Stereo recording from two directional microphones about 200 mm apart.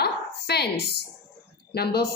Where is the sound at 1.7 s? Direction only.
55° left (ahead or behind).